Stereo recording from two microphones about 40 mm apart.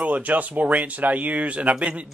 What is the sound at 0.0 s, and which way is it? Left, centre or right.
Speech, right.